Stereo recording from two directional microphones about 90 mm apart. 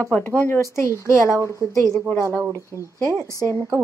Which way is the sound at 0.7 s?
35° left (ahead or behind).